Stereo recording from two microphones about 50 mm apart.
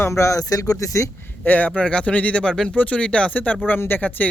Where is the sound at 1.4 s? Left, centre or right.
Left.